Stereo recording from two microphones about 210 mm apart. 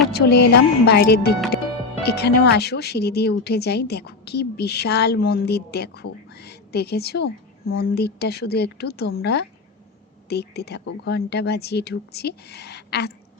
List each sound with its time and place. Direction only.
0.1 s speech: 50° left (ahead or behind)